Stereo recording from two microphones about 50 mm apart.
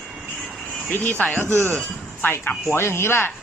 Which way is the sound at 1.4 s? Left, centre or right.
Right.